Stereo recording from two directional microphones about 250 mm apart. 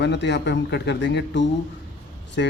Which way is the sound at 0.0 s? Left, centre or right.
Left.